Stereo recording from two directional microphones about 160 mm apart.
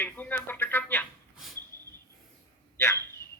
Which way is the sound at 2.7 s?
15° left (ahead or behind).